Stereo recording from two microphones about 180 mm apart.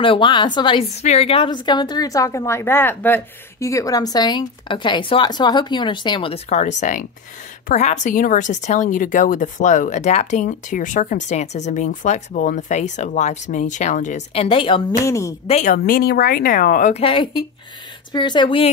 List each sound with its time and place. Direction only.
0.0 s a woman's voice: 30° left (ahead or behind)
15.0 s a woman's voice: 15° left (ahead or behind)
15.4 s a woman's voice: 40° left (ahead or behind)
15.8 s speech: 60° left (ahead or behind)
16.9 s a woman's voice: 30° left (ahead or behind)